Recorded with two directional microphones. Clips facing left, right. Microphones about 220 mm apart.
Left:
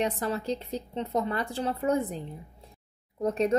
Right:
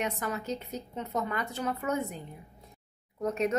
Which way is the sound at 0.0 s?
35° left (ahead or behind).